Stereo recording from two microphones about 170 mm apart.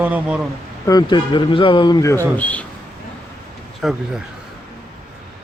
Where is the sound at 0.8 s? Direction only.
25° left (ahead or behind).